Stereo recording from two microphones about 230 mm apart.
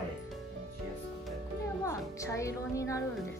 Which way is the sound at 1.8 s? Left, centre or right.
Centre.